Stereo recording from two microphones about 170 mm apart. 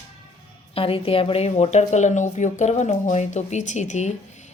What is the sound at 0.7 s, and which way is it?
A woman's voice, 35° left (ahead or behind).